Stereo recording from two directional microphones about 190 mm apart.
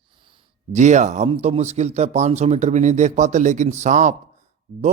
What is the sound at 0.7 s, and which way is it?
Speech, 40° right (ahead or behind).